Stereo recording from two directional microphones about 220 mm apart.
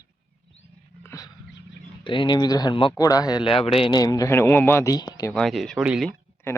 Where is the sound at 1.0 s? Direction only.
15° left (ahead or behind).